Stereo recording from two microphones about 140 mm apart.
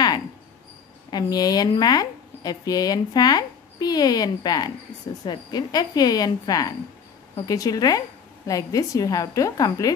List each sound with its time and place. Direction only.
1.1 s a woman's voice: 30° left (ahead or behind)